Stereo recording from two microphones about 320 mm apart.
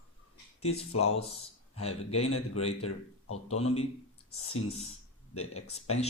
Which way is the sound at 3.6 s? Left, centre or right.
Centre.